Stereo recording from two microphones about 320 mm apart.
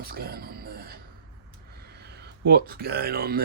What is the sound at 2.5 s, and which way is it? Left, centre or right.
Speech, right.